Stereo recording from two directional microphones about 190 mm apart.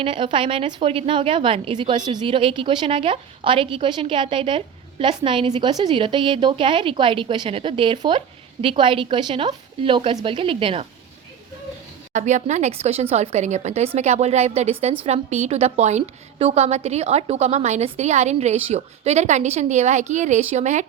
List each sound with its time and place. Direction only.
0.0 s a woman's voice: 25° right (ahead or behind)
12.1 s a woman's voice: 40° right (ahead or behind)